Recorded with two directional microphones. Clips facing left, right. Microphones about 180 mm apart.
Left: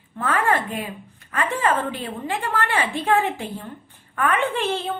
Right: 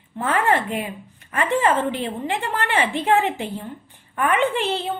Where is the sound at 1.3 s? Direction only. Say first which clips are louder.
Right 3 dB; 20° right (ahead or behind).